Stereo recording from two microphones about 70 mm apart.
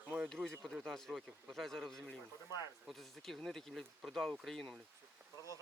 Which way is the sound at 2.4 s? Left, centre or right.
Left.